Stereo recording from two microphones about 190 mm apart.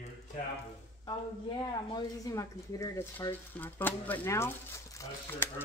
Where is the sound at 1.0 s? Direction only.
25° left (ahead or behind).